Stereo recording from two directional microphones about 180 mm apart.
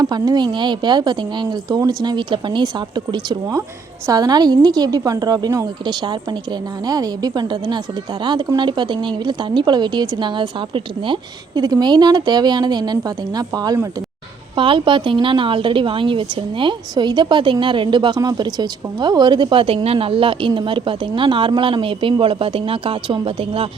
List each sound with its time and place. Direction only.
0.0 s a woman's voice: 25° right (ahead or behind)